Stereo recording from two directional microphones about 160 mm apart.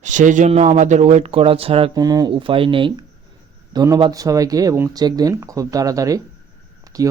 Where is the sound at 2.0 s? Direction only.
25° right (ahead or behind).